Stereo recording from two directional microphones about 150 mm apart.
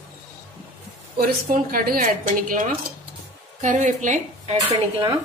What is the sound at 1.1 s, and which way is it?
A woman's voice, 70° right (ahead or behind).